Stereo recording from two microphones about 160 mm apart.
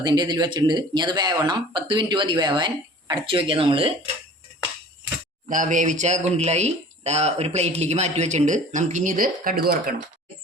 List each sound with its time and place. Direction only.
0.0 s speech: 25° right (ahead or behind)
5.5 s speech: 55° right (ahead or behind)